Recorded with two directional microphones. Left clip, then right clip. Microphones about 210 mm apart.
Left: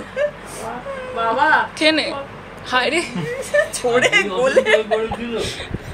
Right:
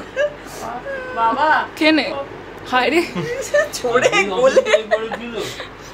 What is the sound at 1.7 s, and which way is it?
A woman's voice, 15° right (ahead or behind).